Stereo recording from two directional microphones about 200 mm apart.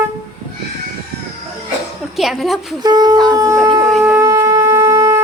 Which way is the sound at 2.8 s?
20° right (ahead or behind).